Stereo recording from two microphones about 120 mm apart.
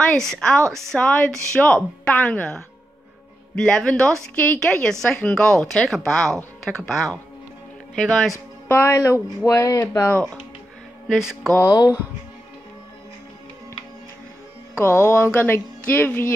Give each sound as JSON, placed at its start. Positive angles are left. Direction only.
{"t": 0.1, "sound": "speech", "side_deg": 5}
{"t": 8.6, "sound": "speech", "side_deg": 20}
{"t": 11.1, "sound": "speech", "side_deg": -5}
{"t": 11.6, "sound": "speech", "side_deg": 30}
{"t": 14.8, "sound": "speech", "side_deg": 20}